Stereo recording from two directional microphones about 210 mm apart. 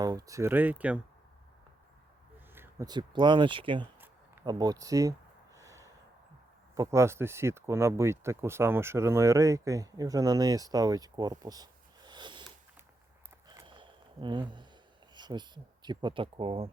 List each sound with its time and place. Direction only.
0.0 s speech: 15° right (ahead or behind)
2.6 s speech: 15° right (ahead or behind)
5.5 s a sound: 15° right (ahead or behind)
6.7 s speech: 15° right (ahead or behind)
13.5 s a sound: 20° right (ahead or behind)
15.1 s speech: 20° right (ahead or behind)